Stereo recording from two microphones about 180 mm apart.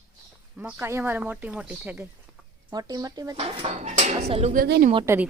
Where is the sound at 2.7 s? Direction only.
20° right (ahead or behind).